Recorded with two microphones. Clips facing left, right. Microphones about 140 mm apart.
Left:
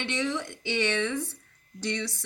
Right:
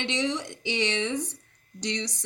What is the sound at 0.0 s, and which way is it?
Speech, 20° right (ahead or behind).